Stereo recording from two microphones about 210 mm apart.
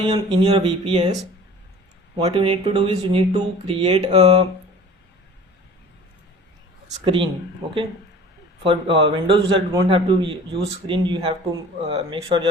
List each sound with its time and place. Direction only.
0.0 s a man's voice: 25° right (ahead or behind)
2.1 s a man's voice: 25° right (ahead or behind)
6.8 s speech: 25° right (ahead or behind)
8.6 s a man's voice: 25° right (ahead or behind)